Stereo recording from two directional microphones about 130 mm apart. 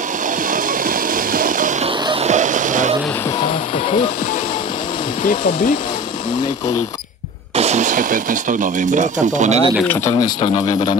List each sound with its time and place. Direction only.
0.5 s music: 90° right
2.2 s music: 70° right (ahead or behind)
5.2 s speech: 90° left
7.5 s speech: 60° right (ahead or behind)